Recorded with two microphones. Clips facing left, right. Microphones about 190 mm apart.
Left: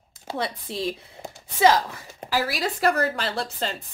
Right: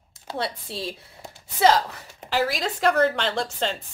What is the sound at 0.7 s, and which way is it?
Speech, 20° left (ahead or behind).